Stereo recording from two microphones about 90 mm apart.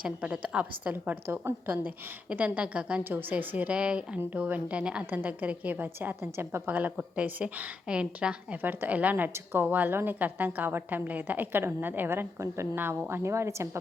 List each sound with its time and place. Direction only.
0.0 s a woman's voice: 15° right (ahead or behind); by 13.7 s 30° right (ahead or behind)